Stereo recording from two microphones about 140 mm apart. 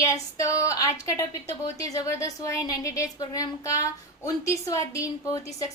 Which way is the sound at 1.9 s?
25° left (ahead or behind).